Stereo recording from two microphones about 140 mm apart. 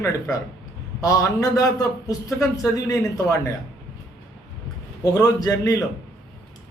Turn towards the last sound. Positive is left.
turn(degrees=25)  # may be behind; listen again after turning